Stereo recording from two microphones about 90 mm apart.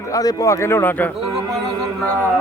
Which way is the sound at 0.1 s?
45° left (ahead or behind).